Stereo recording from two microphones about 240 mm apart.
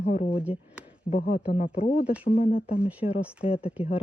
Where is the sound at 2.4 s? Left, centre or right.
Left.